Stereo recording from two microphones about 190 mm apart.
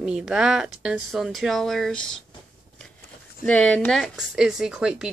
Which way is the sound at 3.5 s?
5° left (ahead or behind).